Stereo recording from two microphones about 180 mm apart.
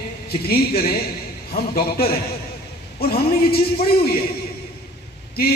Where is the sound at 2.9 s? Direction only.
60° left (ahead or behind).